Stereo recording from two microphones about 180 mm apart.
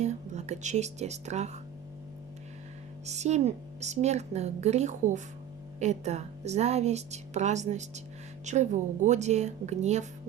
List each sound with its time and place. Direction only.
0.0 s speech: 40° right (ahead or behind)
3.1 s speech: 40° right (ahead or behind)